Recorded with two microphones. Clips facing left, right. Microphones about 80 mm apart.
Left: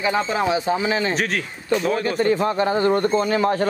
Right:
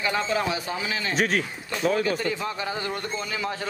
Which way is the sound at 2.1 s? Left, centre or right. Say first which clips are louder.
Left 9 dB; left.